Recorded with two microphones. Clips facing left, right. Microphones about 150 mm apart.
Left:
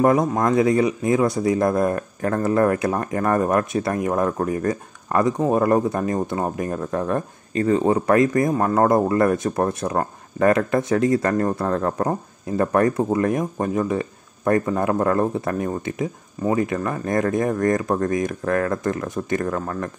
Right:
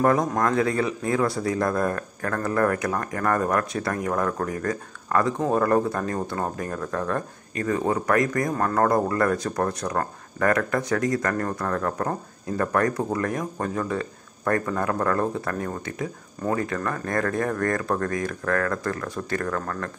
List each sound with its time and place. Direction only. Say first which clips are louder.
0.4 s speech: left 5 dB; 20° left (ahead or behind)